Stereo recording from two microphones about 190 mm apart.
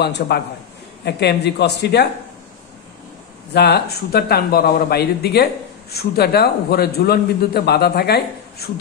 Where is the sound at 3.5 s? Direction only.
60° left (ahead or behind).